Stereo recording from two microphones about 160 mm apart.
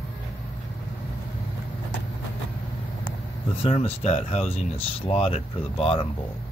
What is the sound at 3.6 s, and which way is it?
Speech, 40° left (ahead or behind).